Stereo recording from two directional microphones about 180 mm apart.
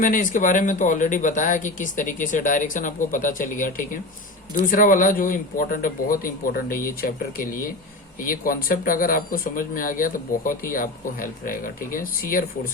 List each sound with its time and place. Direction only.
0.0 s speech: 50° left (ahead or behind)